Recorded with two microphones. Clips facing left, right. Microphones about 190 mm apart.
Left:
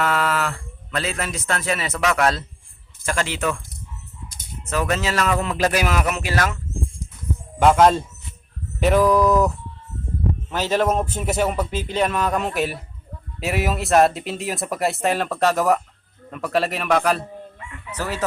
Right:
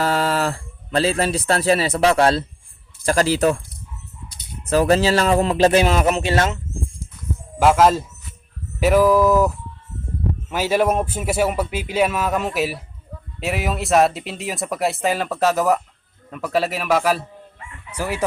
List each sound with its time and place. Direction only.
0.0 s a man's voice: 30° right (ahead or behind)
4.7 s speech: 35° right (ahead or behind)
7.6 s speech: 5° right (ahead or behind)
10.5 s speech: 10° right (ahead or behind)